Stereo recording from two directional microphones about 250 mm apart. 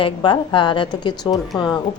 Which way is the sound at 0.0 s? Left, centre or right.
Centre.